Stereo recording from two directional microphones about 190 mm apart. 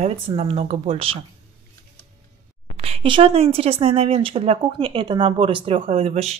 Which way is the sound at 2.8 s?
30° right (ahead or behind).